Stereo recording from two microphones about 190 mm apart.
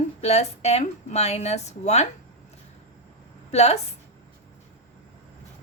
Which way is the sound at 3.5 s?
35° left (ahead or behind).